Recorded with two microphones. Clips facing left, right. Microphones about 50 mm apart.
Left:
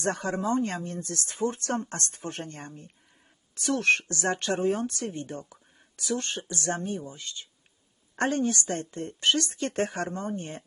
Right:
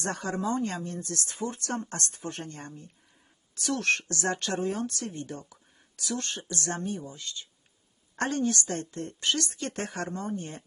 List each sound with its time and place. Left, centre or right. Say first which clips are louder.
0.0 s speech: left 2 dB; left